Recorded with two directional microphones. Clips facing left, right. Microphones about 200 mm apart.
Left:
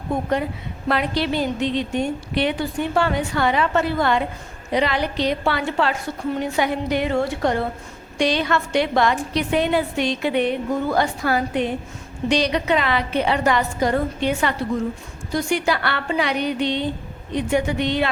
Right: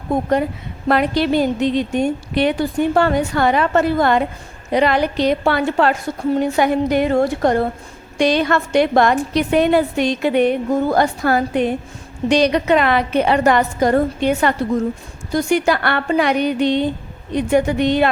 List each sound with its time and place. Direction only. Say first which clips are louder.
0.9 s a woman's voice: right 5 dB; 50° right (ahead or behind)